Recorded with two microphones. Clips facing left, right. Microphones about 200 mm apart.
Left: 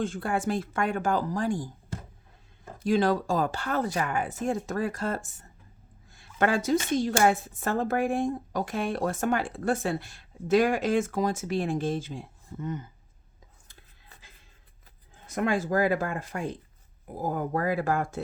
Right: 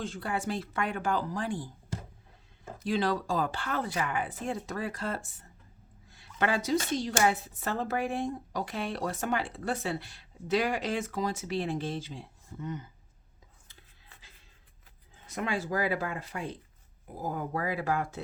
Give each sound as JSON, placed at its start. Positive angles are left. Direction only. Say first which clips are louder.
{"t": 0.0, "sound": "speech", "louder": "left 5 dB", "side_deg": 50}
{"t": 2.8, "sound": "speech", "louder": "left 5 dB", "side_deg": 45}
{"t": 6.1, "sound": "a sound", "louder": "left 1 dB", "side_deg": 50}
{"t": 6.4, "sound": "speech", "louder": "left 4 dB", "side_deg": 50}
{"t": 13.7, "sound": "whispering", "louder": "left 3 dB", "side_deg": 50}
{"t": 15.1, "sound": "speech", "louder": "left 6 dB", "side_deg": 50}